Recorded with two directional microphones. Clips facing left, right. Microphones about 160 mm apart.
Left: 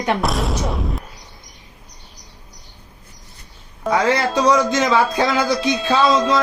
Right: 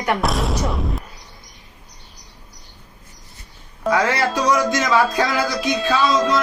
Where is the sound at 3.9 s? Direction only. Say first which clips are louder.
Left 2 dB; 25° left (ahead or behind).